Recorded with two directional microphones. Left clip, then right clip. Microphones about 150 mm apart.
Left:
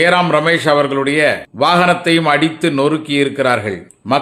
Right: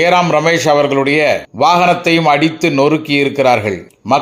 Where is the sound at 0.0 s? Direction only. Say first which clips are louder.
Right 1 dB; 15° right (ahead or behind).